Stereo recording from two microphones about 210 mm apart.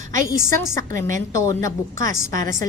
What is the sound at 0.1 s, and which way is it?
A woman's voice, 15° left (ahead or behind).